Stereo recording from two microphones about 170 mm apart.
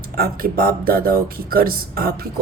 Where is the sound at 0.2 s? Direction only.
60° right (ahead or behind).